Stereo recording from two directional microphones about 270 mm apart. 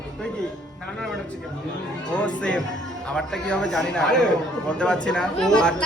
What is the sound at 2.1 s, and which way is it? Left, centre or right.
Speech, centre.